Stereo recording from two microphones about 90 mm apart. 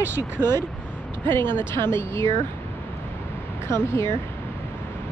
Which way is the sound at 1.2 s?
25° left (ahead or behind).